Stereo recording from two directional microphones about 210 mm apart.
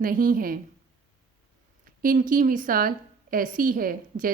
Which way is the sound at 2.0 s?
40° right (ahead or behind).